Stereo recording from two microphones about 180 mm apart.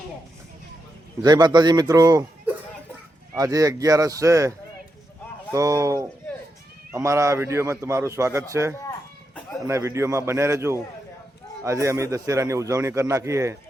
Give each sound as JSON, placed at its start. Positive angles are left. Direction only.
{"t": 1.2, "sound": "speech", "side_deg": -25}
{"t": 3.3, "sound": "a man's voice", "side_deg": -20}